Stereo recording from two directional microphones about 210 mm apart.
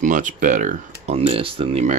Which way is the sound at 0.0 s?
35° right (ahead or behind).